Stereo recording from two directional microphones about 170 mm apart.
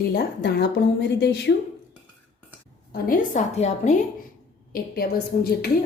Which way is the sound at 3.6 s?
40° left (ahead or behind).